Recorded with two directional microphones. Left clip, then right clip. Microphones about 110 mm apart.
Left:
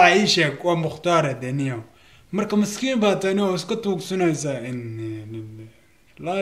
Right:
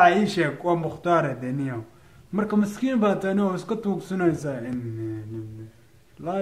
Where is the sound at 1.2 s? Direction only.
45° left (ahead or behind).